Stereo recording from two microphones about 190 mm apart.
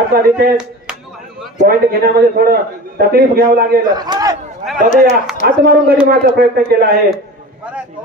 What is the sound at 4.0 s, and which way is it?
Speech, 20° right (ahead or behind).